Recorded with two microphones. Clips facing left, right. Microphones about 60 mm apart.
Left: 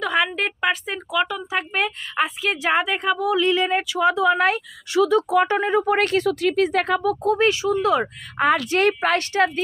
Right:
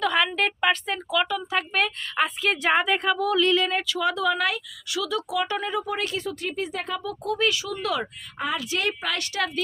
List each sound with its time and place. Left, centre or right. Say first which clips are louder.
0.0 s a woman's voice: left 1 dB; centre; by 5.8 s left
5.8 s speech: left 9 dB; left
6.2 s speech: left 10 dB; left
8.4 s speech: left 9 dB; left